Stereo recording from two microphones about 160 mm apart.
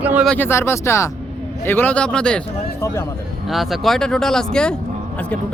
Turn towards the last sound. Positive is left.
turn(degrees=5)  # may be behind; listen again after turning